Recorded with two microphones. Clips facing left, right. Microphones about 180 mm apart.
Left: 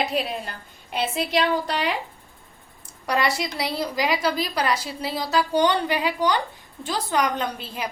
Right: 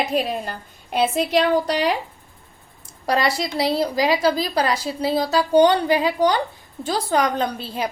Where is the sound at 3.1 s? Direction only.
30° right (ahead or behind).